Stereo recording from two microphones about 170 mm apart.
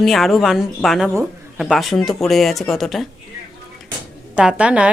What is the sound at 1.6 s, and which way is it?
Speech, centre (ahead or behind).